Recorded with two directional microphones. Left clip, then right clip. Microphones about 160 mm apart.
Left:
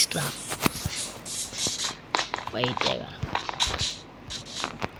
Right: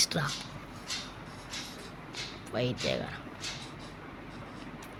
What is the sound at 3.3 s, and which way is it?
Clip-clop, 60° left (ahead or behind).